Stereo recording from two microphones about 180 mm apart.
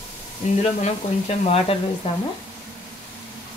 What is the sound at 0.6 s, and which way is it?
Speech, 35° left (ahead or behind).